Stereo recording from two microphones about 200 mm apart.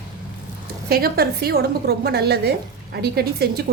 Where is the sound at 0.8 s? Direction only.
50° right (ahead or behind).